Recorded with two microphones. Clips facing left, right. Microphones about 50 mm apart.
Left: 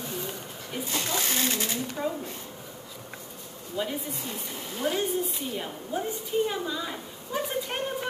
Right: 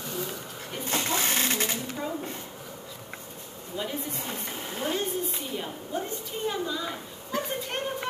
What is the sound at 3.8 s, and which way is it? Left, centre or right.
Female singing, centre.